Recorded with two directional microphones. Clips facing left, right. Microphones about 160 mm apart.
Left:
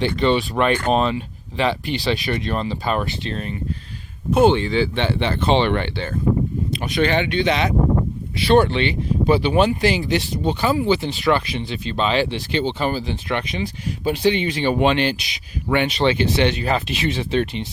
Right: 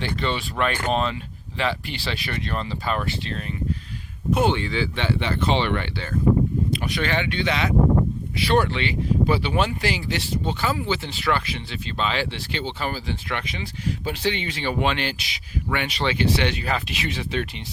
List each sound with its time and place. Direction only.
0.0 s speech: 20° left (ahead or behind)